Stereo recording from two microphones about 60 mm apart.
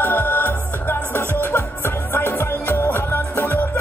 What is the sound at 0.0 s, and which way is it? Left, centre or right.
Music, left.